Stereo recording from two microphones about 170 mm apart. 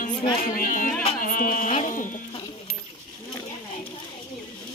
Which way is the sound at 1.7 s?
40° left (ahead or behind).